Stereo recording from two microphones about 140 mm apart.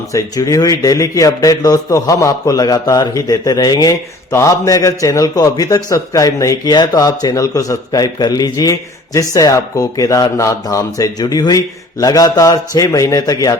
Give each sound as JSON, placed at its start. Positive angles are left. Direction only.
{"t": 0.1, "sound": "a man's voice", "side_deg": 25}